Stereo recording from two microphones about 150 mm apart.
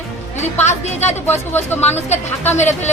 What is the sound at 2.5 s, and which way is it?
Speech, 50° left (ahead or behind).